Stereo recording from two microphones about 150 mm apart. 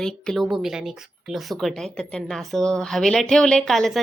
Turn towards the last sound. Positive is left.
turn(degrees=0)  # may be behind; listen again after turning